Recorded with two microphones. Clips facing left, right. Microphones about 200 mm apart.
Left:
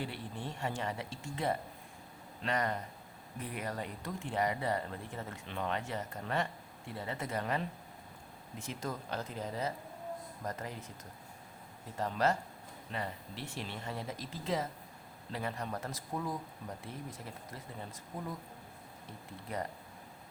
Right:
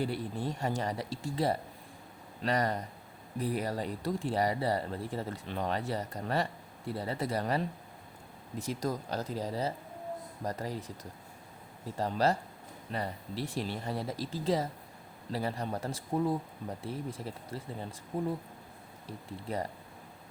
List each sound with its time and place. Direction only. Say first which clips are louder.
0.0 s speech: right 7 dB; 40° right (ahead or behind)
11.9 s speech: right 3 dB; 35° right (ahead or behind)